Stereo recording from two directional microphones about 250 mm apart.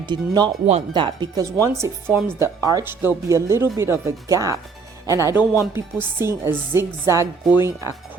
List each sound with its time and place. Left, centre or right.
0.0 s speech: centre